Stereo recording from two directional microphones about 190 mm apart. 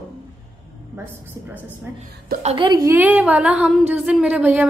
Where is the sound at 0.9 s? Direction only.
10° right (ahead or behind).